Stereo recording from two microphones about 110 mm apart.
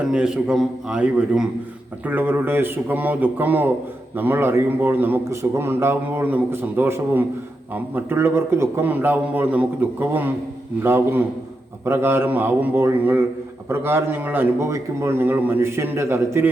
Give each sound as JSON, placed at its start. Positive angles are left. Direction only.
{"t": 0.1, "sound": "a man's voice", "side_deg": -5}